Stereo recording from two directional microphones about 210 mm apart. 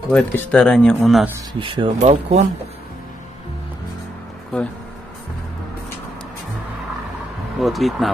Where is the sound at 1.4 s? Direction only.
25° right (ahead or behind).